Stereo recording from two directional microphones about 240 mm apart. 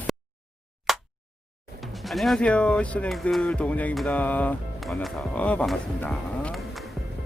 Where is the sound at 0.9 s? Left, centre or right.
Centre.